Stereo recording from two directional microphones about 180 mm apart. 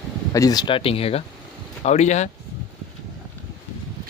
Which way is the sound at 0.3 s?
20° left (ahead or behind).